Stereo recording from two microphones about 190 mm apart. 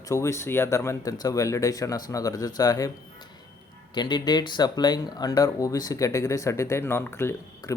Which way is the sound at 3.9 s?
25° left (ahead or behind).